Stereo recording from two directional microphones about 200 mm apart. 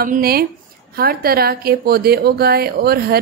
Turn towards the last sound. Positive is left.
turn(degrees=-50)  # may be behind; listen again after turning